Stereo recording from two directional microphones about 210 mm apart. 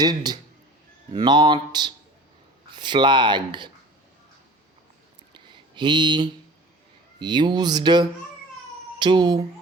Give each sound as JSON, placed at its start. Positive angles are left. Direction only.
{"t": 0.0, "sound": "speech", "side_deg": -20}
{"t": 5.3, "sound": "a sound", "side_deg": -20}
{"t": 7.2, "sound": "speech", "side_deg": -20}